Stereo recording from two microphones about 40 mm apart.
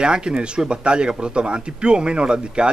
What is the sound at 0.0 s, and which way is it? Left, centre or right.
A man's voice, right.